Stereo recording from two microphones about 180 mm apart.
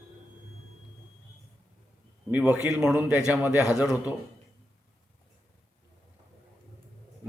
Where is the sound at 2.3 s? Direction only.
10° right (ahead or behind).